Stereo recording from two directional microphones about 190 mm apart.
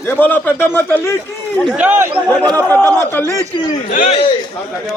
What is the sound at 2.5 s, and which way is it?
Speech, 10° left (ahead or behind).